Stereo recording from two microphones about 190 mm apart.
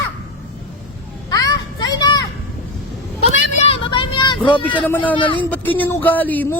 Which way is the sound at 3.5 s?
30° left (ahead or behind).